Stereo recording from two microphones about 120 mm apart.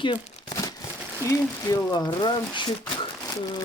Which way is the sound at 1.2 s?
30° left (ahead or behind).